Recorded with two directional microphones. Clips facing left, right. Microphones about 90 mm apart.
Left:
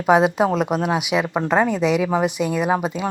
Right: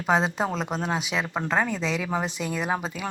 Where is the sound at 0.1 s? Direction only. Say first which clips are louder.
Left 8 dB; 15° left (ahead or behind).